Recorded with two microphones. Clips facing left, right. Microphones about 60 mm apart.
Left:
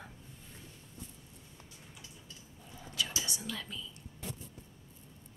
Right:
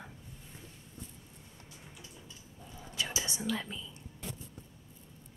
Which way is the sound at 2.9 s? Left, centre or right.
Right.